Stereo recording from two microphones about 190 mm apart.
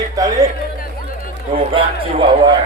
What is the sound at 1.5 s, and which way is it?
A man's voice, 25° right (ahead or behind).